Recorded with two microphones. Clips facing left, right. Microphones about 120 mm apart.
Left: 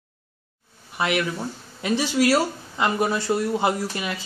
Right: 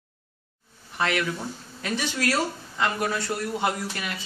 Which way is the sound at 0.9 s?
15° left (ahead or behind).